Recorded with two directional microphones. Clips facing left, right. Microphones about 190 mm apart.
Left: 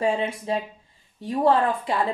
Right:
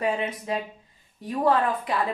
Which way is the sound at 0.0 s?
30° left (ahead or behind).